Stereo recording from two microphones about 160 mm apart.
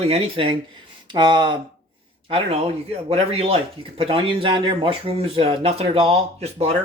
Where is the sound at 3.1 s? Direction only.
40° right (ahead or behind).